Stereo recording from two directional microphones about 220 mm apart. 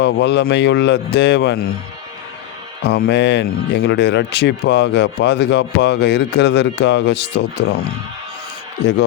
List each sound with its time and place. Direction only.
0.0 s speech: 50° left (ahead or behind)
2.8 s speech: 50° left (ahead or behind)
8.8 s speech: 50° left (ahead or behind)